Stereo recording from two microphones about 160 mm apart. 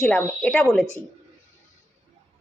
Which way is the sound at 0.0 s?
5° left (ahead or behind).